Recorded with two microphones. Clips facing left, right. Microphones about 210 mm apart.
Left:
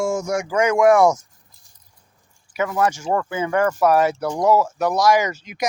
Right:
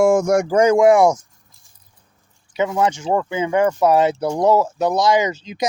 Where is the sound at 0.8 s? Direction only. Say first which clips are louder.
Left 1 dB; 20° right (ahead or behind).